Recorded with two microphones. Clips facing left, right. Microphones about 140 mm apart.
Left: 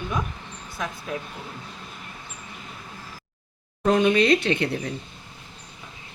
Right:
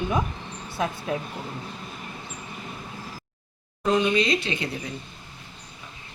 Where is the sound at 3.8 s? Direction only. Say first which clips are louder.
Left 3 dB; 55° left (ahead or behind).